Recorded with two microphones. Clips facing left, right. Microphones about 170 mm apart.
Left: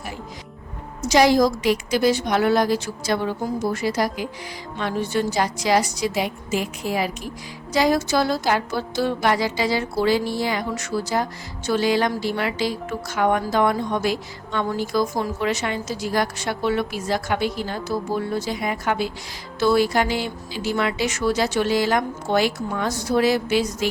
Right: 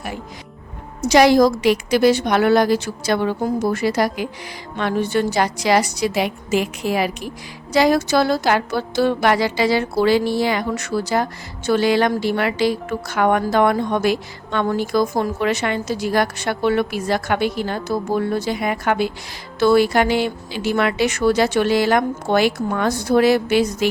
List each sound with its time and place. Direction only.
1.0 s a woman's voice: 65° right (ahead or behind)